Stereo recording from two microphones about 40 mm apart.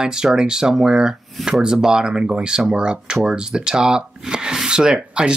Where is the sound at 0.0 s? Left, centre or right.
Centre.